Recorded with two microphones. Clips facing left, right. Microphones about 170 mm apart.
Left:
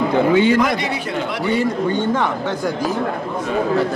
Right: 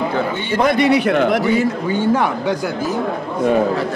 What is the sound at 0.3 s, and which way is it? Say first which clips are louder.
Speech: left 9 dB; 90° left.